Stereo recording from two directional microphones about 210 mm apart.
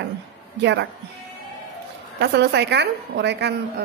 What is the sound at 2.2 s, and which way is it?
A woman's voice, 55° right (ahead or behind).